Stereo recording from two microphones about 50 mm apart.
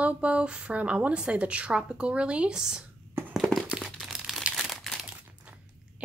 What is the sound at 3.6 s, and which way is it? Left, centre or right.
Crumpling, centre.